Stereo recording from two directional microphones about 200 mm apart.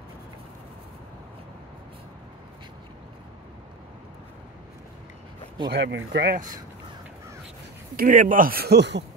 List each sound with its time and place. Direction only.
5.7 s speech: 60° right (ahead or behind)
7.9 s speech: 45° right (ahead or behind)